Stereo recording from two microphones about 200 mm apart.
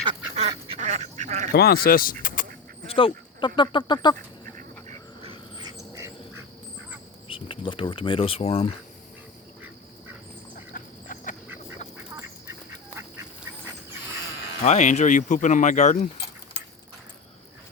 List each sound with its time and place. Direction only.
0.3 s duck: 30° right (ahead or behind)
1.5 s speech: 50° left (ahead or behind)
2.2 s honk: 40° left (ahead or behind)
2.8 s speech: 25° left (ahead or behind)
5.2 s squeal: 25° right (ahead or behind)
5.9 s insect: 15° right (ahead or behind)
7.3 s speech: 25° left (ahead or behind)
10.8 s a sound: 40° left (ahead or behind)
14.6 s speech: 35° left (ahead or behind)